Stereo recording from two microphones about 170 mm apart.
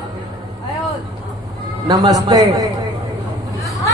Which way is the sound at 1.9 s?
20° right (ahead or behind).